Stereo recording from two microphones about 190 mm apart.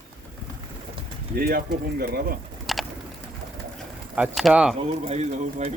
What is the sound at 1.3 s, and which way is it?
Speech, 55° right (ahead or behind).